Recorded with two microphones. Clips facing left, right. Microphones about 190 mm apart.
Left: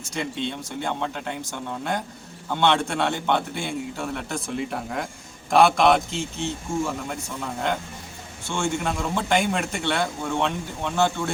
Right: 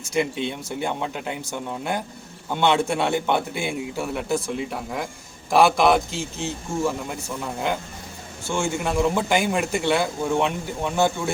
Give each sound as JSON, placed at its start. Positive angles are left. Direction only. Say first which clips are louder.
{"t": 0.1, "sound": "a man's voice", "louder": "right 5 dB", "side_deg": -10}
{"t": 8.4, "sound": "speech", "louder": "right 1 dB", "side_deg": -5}